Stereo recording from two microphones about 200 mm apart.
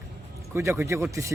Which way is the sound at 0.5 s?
15° right (ahead or behind).